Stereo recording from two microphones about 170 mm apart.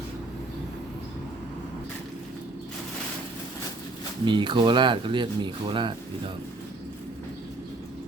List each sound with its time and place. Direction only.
4.3 s speech: 30° right (ahead or behind)